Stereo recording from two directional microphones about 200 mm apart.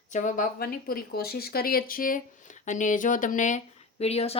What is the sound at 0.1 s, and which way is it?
Speech, 40° left (ahead or behind).